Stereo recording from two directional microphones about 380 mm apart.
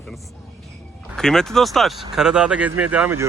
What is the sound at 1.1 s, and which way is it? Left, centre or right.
Speech, centre.